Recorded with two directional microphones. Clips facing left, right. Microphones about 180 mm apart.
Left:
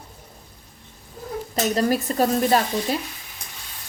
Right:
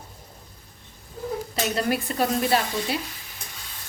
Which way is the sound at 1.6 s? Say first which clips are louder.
Left 5 dB; 40° left (ahead or behind).